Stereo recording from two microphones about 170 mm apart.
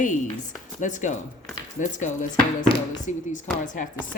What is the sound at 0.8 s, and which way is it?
Speech, 45° left (ahead or behind).